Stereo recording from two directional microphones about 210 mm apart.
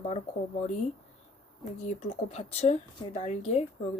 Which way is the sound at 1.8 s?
30° left (ahead or behind).